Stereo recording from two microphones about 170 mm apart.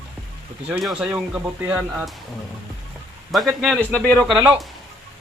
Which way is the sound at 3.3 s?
Centre (ahead or behind).